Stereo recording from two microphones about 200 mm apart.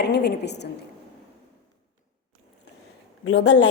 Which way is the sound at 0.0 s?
55° left (ahead or behind).